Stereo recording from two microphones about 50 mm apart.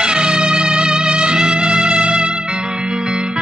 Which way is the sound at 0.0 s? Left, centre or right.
Centre.